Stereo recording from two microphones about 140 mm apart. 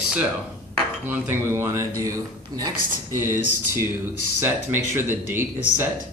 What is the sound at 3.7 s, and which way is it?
Speech, 15° right (ahead or behind).